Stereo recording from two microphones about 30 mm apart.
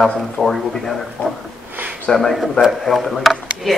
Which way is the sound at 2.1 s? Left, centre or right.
Centre.